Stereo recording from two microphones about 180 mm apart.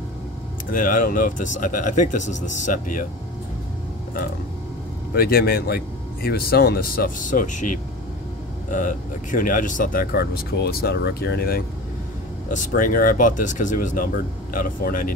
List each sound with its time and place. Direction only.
0.7 s speech: 50° left (ahead or behind)
5.1 s speech: 60° left (ahead or behind)
8.7 s speech: 45° left (ahead or behind)
12.4 s speech: 45° left (ahead or behind)